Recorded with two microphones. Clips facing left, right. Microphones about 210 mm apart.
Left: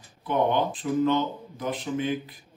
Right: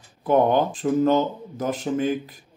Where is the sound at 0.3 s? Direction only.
45° right (ahead or behind).